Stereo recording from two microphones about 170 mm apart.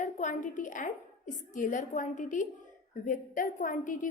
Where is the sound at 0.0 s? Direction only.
45° left (ahead or behind).